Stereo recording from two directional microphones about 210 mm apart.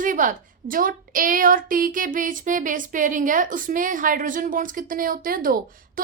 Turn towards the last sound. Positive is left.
turn(degrees=-40)  # may be behind; listen again after turning